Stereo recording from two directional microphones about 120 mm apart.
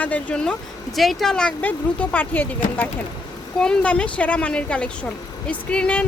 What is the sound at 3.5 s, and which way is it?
Speech, 5° left (ahead or behind).